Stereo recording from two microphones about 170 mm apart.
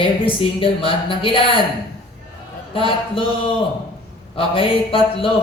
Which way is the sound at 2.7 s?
30° left (ahead or behind).